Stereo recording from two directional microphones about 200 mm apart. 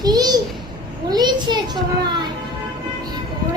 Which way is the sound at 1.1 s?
20° right (ahead or behind).